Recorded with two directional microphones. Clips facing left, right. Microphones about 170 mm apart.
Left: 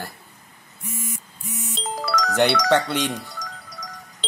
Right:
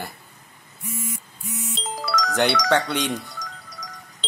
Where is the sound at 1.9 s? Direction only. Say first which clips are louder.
Left 1 dB; 55° left (ahead or behind).